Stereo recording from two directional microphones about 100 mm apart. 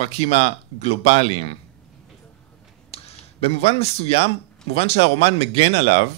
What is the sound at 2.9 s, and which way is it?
Speech, 90° left.